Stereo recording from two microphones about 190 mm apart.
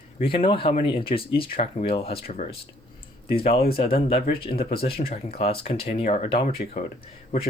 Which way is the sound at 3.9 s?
35° left (ahead or behind).